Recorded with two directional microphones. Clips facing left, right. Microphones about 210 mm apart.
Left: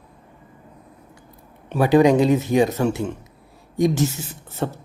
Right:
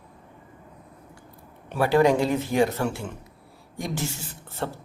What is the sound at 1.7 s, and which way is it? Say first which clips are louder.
Speech: left 5 dB; 20° left (ahead or behind).